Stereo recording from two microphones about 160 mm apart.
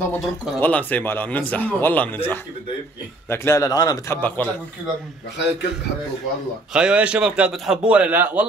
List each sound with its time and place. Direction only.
0.0 s a man's voice: 10° left (ahead or behind)
6.7 s a man's voice: 5° right (ahead or behind)